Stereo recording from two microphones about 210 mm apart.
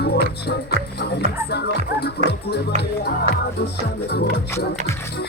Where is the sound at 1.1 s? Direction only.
50° left (ahead or behind).